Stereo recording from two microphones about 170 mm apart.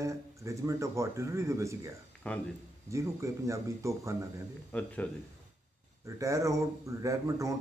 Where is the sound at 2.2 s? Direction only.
5° left (ahead or behind).